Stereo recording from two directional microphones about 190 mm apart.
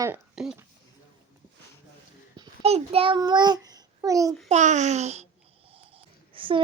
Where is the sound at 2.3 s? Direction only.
20° right (ahead or behind).